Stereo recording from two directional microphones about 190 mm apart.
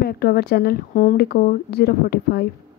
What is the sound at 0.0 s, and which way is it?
Speech, 55° left (ahead or behind).